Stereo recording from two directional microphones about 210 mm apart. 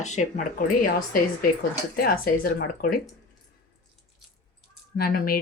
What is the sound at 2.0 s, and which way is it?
Speech, 45° left (ahead or behind).